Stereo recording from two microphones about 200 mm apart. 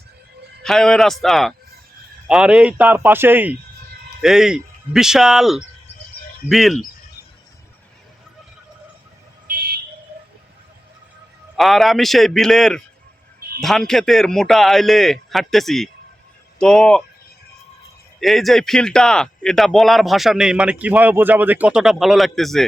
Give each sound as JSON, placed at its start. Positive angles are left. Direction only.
{"t": 0.6, "sound": "speech", "side_deg": 0}
{"t": 9.5, "sound": "a sound", "side_deg": -50}
{"t": 11.5, "sound": "speech", "side_deg": 0}
{"t": 18.2, "sound": "speech", "side_deg": 0}